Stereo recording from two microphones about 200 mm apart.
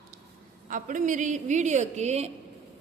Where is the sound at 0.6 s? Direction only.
40° right (ahead or behind).